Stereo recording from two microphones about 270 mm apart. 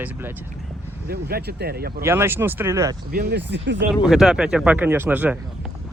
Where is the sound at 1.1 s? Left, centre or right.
Right.